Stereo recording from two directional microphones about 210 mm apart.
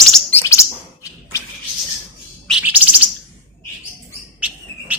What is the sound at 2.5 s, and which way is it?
Bird, 5° right (ahead or behind).